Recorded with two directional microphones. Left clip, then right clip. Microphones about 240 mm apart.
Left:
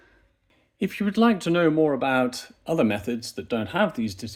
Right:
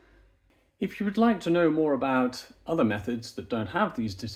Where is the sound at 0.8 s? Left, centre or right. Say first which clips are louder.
Left 4 dB; left.